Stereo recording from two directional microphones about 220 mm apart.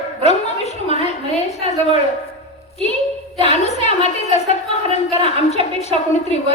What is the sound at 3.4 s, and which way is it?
A woman's voice, 30° left (ahead or behind).